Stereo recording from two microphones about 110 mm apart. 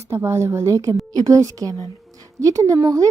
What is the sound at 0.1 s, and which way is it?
Speech, 25° right (ahead or behind).